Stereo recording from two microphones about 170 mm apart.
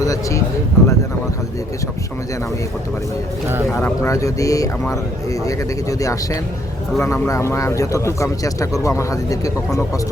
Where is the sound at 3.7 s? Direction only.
15° left (ahead or behind).